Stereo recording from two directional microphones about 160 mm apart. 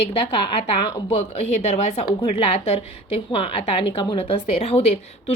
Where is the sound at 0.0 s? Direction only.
35° left (ahead or behind).